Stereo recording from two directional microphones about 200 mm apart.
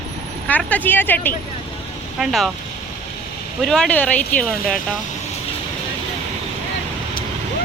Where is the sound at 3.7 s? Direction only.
5° left (ahead or behind).